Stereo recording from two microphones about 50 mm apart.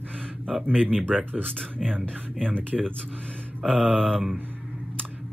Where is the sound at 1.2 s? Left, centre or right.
Right.